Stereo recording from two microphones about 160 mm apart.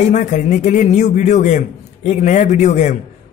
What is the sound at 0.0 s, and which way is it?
A man's voice, 50° left (ahead or behind).